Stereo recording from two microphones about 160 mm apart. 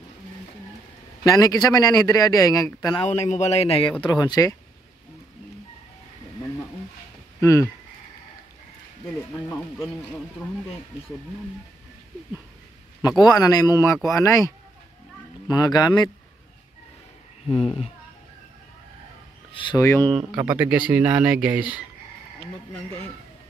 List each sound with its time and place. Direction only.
1.2 s a man's voice: 20° left (ahead or behind)
3.1 s speech: 45° left (ahead or behind)
4.0 s a man's voice: 25° left (ahead or behind)
7.3 s speech: 20° left (ahead or behind)
13.2 s a man's voice: 25° left (ahead or behind)
17.5 s speech: 35° left (ahead or behind)
19.5 s speech: 30° left (ahead or behind)
19.8 s speech: 15° left (ahead or behind)
20.1 s speech: 5° right (ahead or behind)